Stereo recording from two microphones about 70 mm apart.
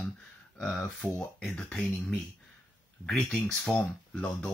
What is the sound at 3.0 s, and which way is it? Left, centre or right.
Speech, centre.